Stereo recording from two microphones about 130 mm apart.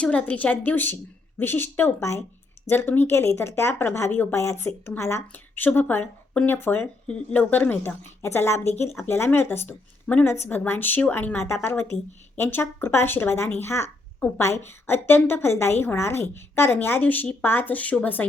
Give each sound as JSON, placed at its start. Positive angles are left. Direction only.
{"t": 0.0, "sound": "speech", "side_deg": 10}